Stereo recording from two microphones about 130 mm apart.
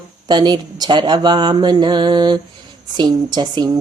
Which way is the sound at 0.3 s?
35° right (ahead or behind).